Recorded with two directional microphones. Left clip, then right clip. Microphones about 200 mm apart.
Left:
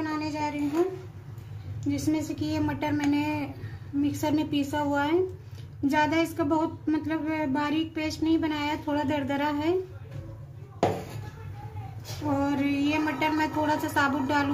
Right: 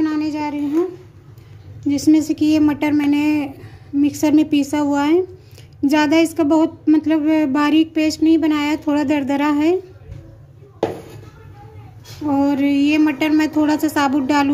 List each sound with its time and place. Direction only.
0.0 s child singing: 50° right (ahead or behind)
1.9 s speech: 45° right (ahead or behind)
12.4 s speech: 50° right (ahead or behind)